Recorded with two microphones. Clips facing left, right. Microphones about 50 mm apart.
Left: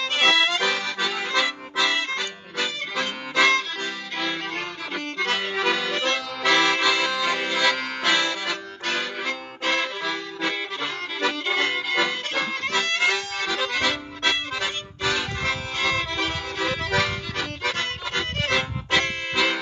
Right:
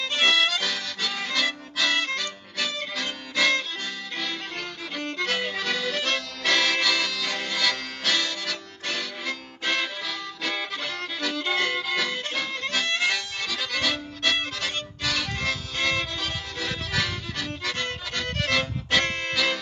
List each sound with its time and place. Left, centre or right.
0.3 s music: left
0.9 s accordion: left
4.9 s accordion: left
12.3 s harmonica: left
13.5 s accordion: left
14.6 s music: left